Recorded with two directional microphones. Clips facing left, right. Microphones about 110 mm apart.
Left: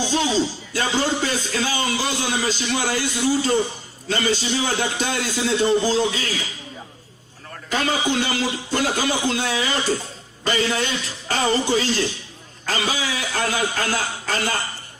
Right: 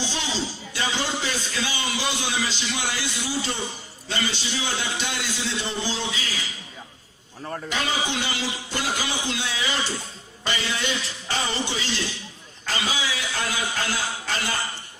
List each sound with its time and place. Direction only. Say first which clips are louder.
0.7 s a man's voice: left 3 dB; 45° left (ahead or behind)
7.7 s a man's voice: left 6 dB; 45° left (ahead or behind)